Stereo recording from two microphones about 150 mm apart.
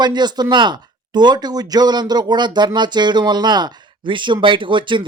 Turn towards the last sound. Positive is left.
turn(degrees=-30)  # may be behind; listen again after turning